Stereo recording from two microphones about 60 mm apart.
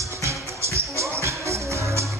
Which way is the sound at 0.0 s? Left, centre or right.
Right.